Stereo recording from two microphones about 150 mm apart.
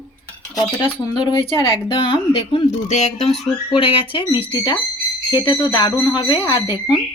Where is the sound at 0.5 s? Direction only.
30° left (ahead or behind).